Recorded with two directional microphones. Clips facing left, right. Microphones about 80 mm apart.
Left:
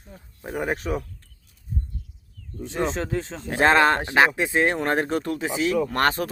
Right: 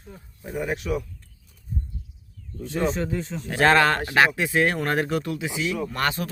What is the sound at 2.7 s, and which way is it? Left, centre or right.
Speech, left.